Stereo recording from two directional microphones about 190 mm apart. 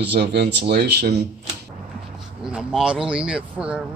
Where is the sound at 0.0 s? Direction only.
65° right (ahead or behind).